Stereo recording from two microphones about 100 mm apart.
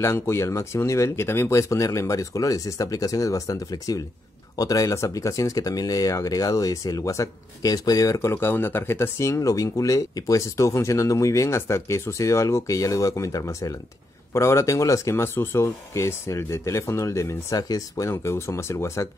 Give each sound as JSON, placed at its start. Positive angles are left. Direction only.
{"t": 0.0, "sound": "speech", "side_deg": 30}